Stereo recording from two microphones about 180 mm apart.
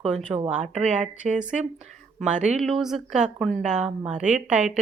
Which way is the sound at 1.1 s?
40° right (ahead or behind).